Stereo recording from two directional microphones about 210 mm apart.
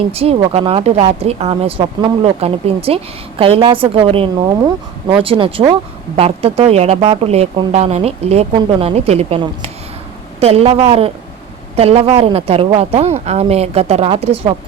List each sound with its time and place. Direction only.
0.1 s speech: 30° right (ahead or behind)